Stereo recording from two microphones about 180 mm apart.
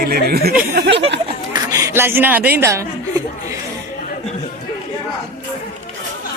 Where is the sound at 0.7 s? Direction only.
70° right (ahead or behind).